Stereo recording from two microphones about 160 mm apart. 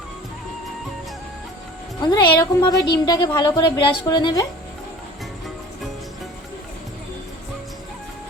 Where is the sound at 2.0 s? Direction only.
25° left (ahead or behind).